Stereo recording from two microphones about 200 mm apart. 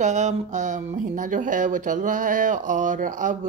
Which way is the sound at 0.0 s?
35° right (ahead or behind).